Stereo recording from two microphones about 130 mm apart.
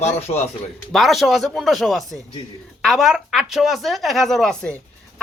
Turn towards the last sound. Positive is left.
turn(degrees=5)  # may be behind; listen again after turning